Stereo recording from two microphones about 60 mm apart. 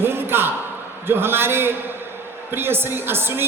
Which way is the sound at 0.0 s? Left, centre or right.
Right.